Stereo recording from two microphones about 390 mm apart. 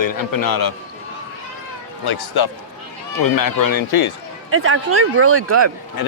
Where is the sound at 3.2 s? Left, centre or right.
Left.